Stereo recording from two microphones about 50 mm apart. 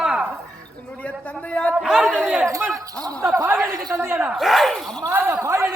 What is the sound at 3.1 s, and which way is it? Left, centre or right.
Speech, right.